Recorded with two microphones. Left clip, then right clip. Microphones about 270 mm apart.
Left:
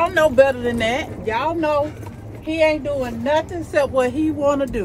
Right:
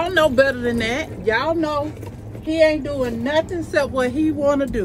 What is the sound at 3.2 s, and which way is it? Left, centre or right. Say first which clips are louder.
Speech: left 2 dB; centre.